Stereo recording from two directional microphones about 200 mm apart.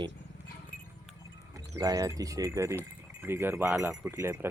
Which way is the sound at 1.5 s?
15° right (ahead or behind).